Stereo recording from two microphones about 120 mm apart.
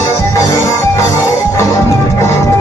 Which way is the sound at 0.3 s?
30° left (ahead or behind).